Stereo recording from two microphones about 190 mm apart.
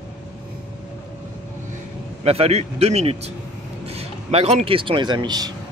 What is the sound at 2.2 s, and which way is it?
Speech, 30° right (ahead or behind).